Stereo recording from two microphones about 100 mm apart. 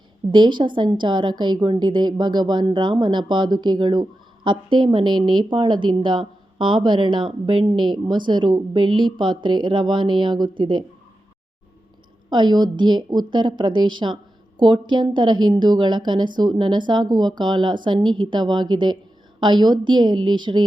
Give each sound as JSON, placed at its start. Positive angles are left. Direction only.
{"t": 0.3, "sound": "a woman's voice", "side_deg": -50}
{"t": 12.3, "sound": "a woman's voice", "side_deg": -45}